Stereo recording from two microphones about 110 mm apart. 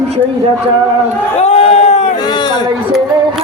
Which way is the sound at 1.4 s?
75° left (ahead or behind).